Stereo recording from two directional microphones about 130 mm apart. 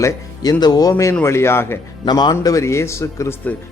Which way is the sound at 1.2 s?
20° left (ahead or behind).